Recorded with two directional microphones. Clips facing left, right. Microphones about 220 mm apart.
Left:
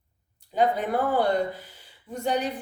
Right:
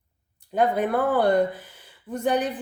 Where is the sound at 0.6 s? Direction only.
55° right (ahead or behind).